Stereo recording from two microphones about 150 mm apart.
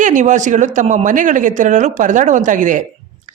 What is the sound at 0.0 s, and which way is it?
Speech, 55° right (ahead or behind).